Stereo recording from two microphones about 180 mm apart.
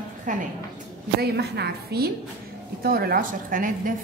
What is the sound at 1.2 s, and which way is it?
A woman's voice, 65° right (ahead or behind).